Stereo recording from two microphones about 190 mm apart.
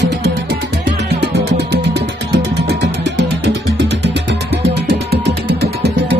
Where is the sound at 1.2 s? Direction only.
65° right (ahead or behind).